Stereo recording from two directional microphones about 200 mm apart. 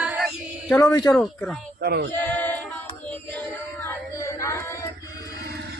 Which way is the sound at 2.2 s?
10° left (ahead or behind).